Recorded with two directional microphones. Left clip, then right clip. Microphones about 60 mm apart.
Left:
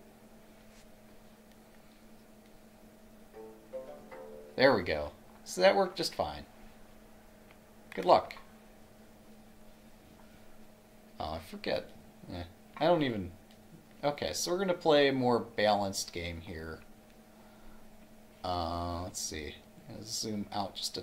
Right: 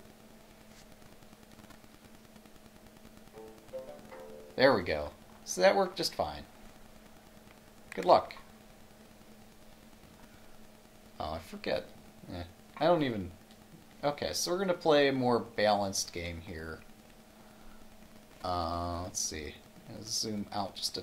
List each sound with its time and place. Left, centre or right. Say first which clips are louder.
4.6 s speech: even; centre
7.9 s speech: right 1 dB; centre
11.1 s a sound: even; centre
12.3 s speech: even; centre
18.4 s speech: right 1 dB; centre